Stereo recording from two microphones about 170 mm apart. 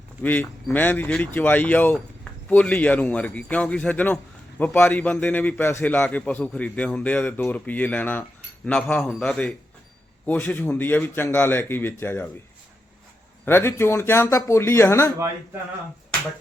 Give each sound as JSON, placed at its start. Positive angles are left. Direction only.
{"t": 0.2, "sound": "a man's voice", "side_deg": 10}
{"t": 13.4, "sound": "a man's voice", "side_deg": 15}